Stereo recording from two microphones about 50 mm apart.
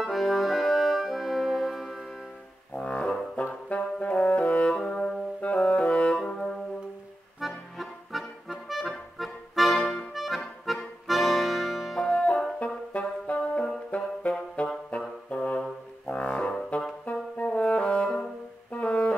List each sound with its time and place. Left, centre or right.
0.0 s brass instrument: centre
2.7 s music: left
3.6 s brass instrument: left
6.2 s music: centre
7.3 s music: centre
9.8 s accordion: centre
10.1 s accordion: centre
12.1 s music: centre
17.0 s brass instrument: left